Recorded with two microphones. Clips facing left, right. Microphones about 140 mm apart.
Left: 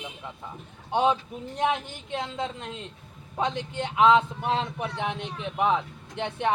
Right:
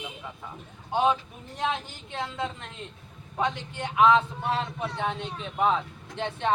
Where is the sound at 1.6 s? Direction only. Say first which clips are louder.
Left 3 dB; 20° left (ahead or behind).